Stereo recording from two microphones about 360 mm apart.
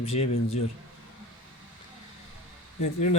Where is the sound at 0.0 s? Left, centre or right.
Centre.